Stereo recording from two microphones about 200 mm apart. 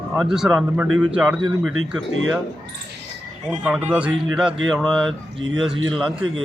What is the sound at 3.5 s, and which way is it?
Speech, 5° right (ahead or behind).